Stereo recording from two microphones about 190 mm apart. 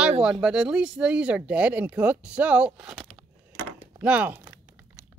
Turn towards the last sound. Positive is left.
turn(degrees=-15)  # may be behind; listen again after turning